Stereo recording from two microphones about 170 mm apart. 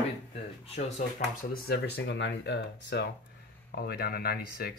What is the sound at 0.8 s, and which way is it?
Speech, 45° left (ahead or behind).